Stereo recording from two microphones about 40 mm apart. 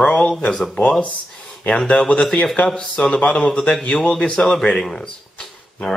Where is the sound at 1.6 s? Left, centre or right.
Left.